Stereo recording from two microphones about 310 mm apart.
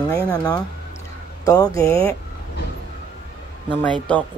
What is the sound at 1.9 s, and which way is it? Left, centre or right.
Speech, centre.